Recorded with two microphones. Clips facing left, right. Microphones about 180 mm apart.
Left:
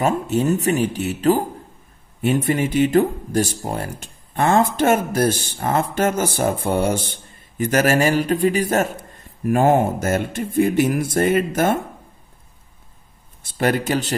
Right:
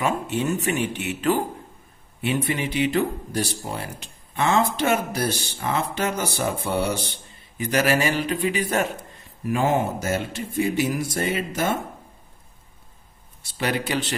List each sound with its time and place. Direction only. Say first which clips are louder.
0.0 s speech: left 5 dB; 40° left (ahead or behind)
13.4 s a man's voice: left 6 dB; 50° left (ahead or behind)